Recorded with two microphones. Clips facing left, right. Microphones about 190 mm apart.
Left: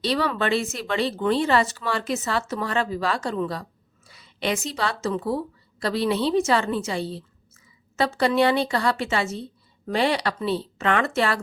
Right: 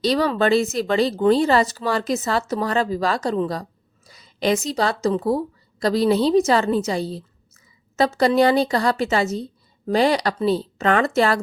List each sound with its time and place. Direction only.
0.0 s a woman's voice: 40° right (ahead or behind)